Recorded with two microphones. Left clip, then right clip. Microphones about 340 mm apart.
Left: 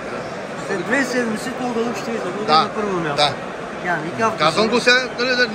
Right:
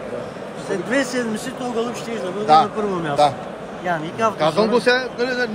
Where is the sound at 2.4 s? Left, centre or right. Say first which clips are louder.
Right 2 dB; right.